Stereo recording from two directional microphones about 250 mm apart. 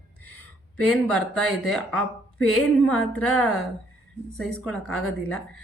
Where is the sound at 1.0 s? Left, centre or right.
Centre.